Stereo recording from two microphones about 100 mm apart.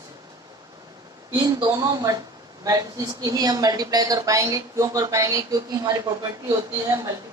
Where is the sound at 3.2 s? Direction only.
40° right (ahead or behind).